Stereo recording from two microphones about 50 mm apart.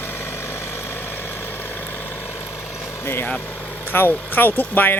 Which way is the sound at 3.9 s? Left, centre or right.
Left.